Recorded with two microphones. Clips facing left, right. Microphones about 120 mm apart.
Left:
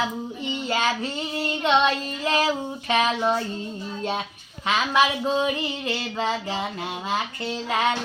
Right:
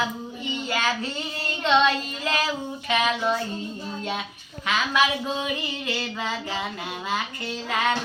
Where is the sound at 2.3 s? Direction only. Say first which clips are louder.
Left 4 dB; 30° left (ahead or behind).